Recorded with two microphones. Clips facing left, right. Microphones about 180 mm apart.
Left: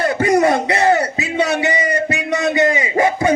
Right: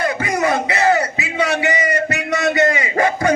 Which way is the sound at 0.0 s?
35° left (ahead or behind).